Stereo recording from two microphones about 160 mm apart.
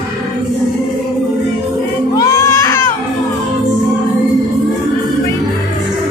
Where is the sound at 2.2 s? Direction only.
15° left (ahead or behind).